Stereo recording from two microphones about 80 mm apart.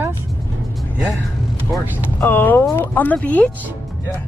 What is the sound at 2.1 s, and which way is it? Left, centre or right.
Speech, left.